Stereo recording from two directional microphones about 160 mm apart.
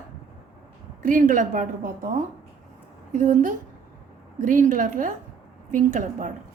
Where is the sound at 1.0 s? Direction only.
55° right (ahead or behind).